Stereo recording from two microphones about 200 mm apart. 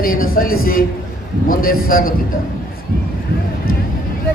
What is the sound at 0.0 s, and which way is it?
A man's voice, 45° left (ahead or behind).